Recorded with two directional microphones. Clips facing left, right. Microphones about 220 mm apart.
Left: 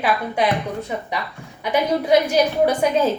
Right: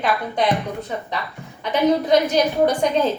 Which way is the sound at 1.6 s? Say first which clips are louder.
Right 2 dB; 10° left (ahead or behind).